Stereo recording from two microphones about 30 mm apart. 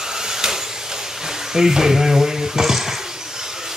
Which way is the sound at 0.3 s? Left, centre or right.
Centre.